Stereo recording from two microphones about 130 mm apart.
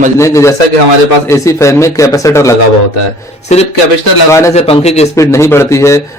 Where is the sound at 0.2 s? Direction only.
25° left (ahead or behind).